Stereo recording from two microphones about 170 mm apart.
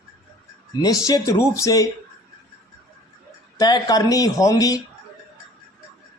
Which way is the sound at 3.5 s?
20° left (ahead or behind).